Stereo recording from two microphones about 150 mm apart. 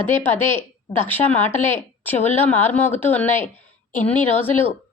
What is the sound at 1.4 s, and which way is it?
Speech, 50° left (ahead or behind).